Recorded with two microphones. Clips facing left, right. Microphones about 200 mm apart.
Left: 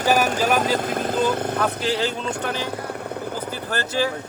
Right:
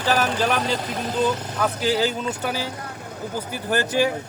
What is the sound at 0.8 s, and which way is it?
Speech, 50° left (ahead or behind).